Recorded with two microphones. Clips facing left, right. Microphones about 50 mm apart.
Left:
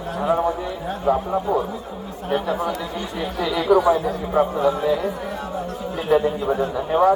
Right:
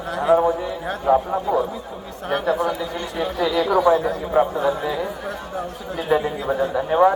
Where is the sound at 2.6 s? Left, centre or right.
Centre.